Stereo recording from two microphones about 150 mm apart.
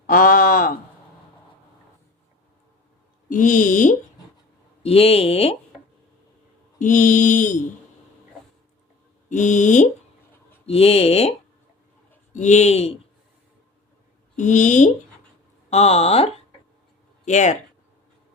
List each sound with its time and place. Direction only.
0.1 s a sound: 65° left (ahead or behind)
3.2 s speech: 60° left (ahead or behind)
4.8 s speech: 40° left (ahead or behind)
6.7 s mantra: 60° left (ahead or behind)
9.3 s speech: 55° left (ahead or behind)
10.7 s speech: 40° left (ahead or behind)
12.3 s speech: 50° left (ahead or behind)
14.3 s speech: 55° left (ahead or behind)